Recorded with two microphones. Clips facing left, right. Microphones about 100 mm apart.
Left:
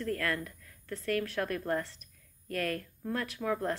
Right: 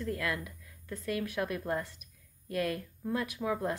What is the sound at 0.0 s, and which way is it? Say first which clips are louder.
A woman's voice: left 1 dB; 10° right (ahead or behind).